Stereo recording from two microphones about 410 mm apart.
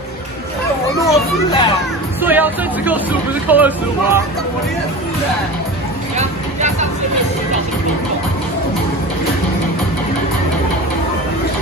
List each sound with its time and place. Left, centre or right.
0.9 s a child's voice: centre
2.2 s speech: centre
6.1 s vehicle: centre